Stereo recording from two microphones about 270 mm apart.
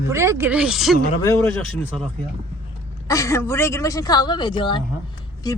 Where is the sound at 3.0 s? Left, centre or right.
Centre.